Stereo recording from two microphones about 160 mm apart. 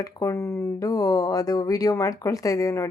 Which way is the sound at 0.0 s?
20° left (ahead or behind).